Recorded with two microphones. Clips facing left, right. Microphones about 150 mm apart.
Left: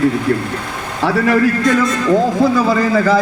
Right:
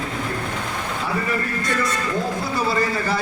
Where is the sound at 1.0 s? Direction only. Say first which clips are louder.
Left 14 dB; 85° left.